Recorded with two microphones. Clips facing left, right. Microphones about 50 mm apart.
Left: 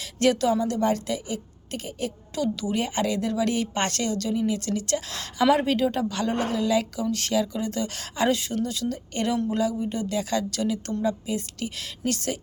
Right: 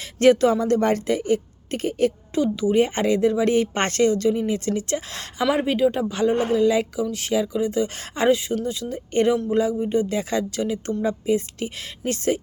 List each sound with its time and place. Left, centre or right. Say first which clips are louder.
0.0 s speech: right 6 dB; right
2.3 s speech: right 3 dB; right
5.4 s speech: right 1 dB; centre
7.9 s speech: right 2 dB; right
8.3 s speech: right 5 dB; centre